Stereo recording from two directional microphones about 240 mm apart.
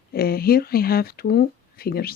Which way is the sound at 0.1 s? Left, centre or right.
Left.